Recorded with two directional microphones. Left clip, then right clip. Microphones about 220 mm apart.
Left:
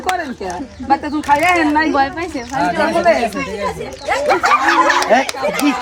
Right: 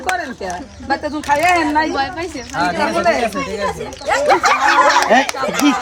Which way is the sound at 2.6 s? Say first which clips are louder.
Left 1 dB; 5° right (ahead or behind).